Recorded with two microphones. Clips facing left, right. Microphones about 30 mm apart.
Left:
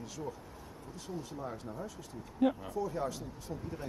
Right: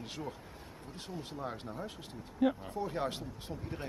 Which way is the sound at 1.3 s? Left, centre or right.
Right.